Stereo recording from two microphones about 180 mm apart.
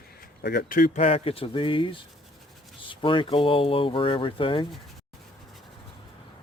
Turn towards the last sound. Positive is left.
turn(degrees=30)  # may be behind; listen again after turning